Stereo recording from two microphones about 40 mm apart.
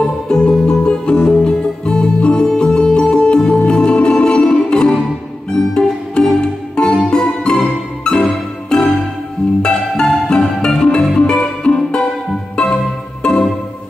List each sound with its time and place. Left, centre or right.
0.3 s music: left
13.2 s music: left